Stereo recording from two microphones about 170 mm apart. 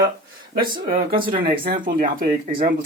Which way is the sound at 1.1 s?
55° right (ahead or behind).